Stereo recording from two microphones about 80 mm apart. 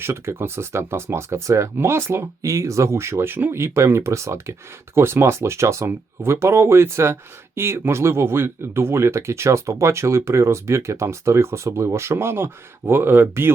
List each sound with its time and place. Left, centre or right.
0.0 s speech: right